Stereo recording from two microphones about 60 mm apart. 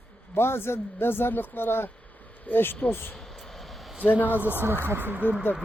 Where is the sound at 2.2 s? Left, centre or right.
Left.